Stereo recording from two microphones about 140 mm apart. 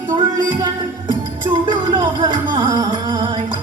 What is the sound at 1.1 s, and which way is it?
Music, 35° right (ahead or behind).